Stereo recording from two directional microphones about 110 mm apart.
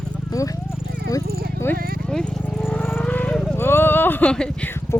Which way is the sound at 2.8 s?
20° left (ahead or behind).